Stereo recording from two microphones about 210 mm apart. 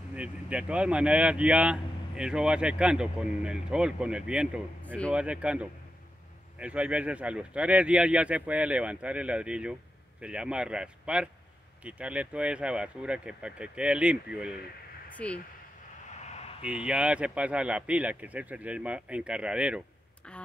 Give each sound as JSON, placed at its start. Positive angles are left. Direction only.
{"t": 0.1, "sound": "speech", "side_deg": -5}
{"t": 4.8, "sound": "speech", "side_deg": 5}
{"t": 5.1, "sound": "speech", "side_deg": -5}
{"t": 15.1, "sound": "speech", "side_deg": 5}
{"t": 16.2, "sound": "a sound", "side_deg": 30}
{"t": 16.6, "sound": "speech", "side_deg": -5}
{"t": 20.3, "sound": "a sound", "side_deg": 5}